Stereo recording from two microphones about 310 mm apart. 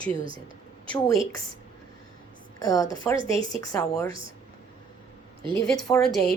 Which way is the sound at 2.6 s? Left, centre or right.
Centre.